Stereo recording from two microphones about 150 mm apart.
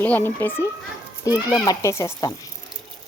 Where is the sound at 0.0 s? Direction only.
15° left (ahead or behind).